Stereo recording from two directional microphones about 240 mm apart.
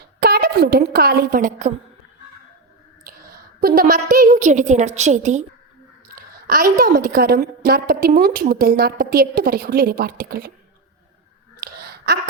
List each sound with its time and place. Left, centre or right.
0.2 s a woman's voice: right
3.0 s a woman's voice: right
11.6 s a sound: right